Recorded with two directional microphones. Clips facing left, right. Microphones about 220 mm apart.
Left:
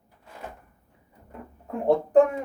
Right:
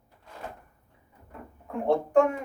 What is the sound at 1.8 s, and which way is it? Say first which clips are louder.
Speech: left 3 dB; 35° left (ahead or behind).